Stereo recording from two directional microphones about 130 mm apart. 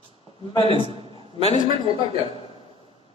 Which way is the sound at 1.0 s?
45° right (ahead or behind).